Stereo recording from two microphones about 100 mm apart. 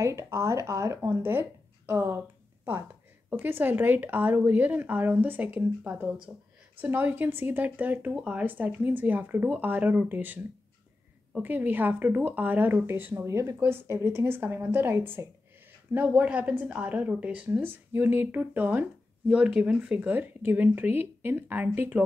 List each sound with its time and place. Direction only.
0.0 s a woman's voice: 30° right (ahead or behind)